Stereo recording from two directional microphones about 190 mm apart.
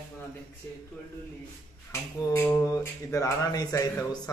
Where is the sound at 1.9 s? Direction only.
10° left (ahead or behind).